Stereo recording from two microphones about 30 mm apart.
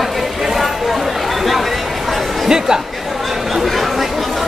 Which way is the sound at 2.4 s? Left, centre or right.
Right.